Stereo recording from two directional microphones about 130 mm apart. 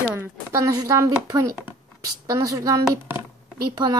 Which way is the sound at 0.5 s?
25° right (ahead or behind).